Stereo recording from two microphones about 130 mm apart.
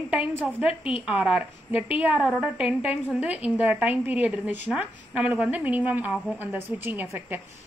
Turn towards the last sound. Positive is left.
turn(degrees=-15)  # may be behind; listen again after turning